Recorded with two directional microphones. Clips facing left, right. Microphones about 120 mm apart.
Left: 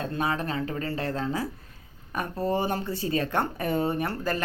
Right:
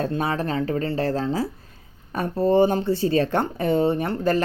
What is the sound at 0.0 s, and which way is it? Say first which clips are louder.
Speech: right 4 dB; 35° right (ahead or behind).